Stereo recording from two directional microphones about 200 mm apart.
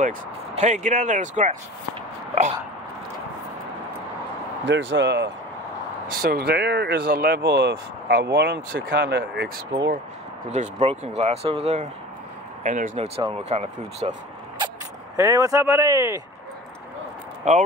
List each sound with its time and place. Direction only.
0.6 s speech: 35° right (ahead or behind)
4.6 s speech: 65° right (ahead or behind)
6.1 s speech: 50° right (ahead or behind)
10.5 s speech: 35° right (ahead or behind)
15.1 s speech: 15° right (ahead or behind)
17.4 s speech: 35° right (ahead or behind)